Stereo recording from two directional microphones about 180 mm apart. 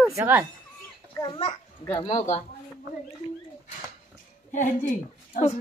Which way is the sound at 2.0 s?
35° left (ahead or behind).